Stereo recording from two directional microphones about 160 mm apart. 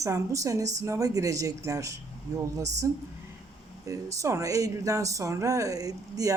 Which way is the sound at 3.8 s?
20° right (ahead or behind).